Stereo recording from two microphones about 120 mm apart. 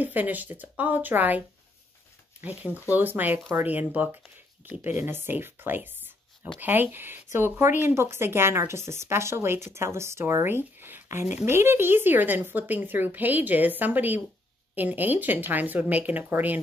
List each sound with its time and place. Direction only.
0.0 s speech: 15° right (ahead or behind)
2.4 s speech: 10° right (ahead or behind)